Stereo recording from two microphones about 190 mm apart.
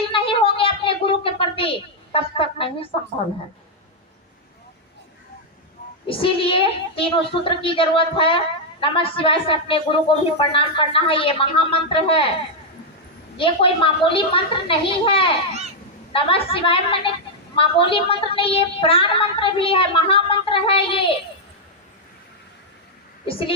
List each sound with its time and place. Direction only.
0.1 s a sound: 30° left (ahead or behind)
2.1 s a woman's voice: 30° left (ahead or behind)
6.1 s a woman's voice: 30° left (ahead or behind)
13.3 s a woman's voice: 30° left (ahead or behind)